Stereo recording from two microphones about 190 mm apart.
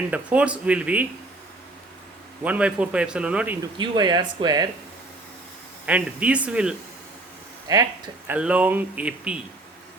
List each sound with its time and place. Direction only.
0.1 s a man's voice: 5° right (ahead or behind)
2.4 s a man's voice: 5° right (ahead or behind)
3.8 s speech: 20° right (ahead or behind)
5.8 s a man's voice: 5° right (ahead or behind)
8.3 s a man's voice: 5° right (ahead or behind)